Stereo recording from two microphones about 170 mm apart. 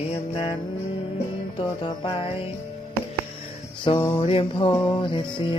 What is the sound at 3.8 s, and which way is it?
Mantra, 30° left (ahead or behind).